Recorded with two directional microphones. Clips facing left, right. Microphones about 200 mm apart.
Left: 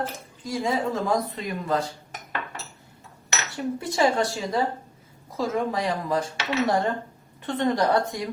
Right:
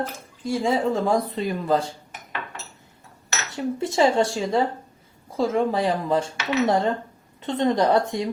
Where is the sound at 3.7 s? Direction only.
25° right (ahead or behind).